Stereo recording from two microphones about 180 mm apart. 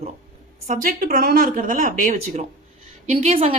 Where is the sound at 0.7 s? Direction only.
50° right (ahead or behind).